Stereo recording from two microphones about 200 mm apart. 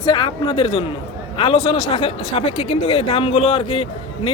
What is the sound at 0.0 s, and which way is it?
Speech, 25° left (ahead or behind).